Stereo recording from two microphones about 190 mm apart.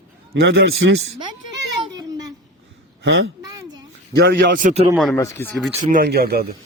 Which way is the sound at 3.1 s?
90° right.